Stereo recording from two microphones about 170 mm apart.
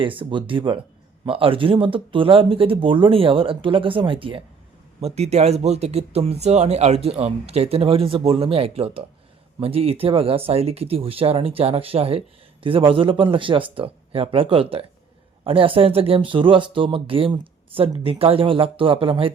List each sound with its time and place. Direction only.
0.0 s speech: 30° right (ahead or behind)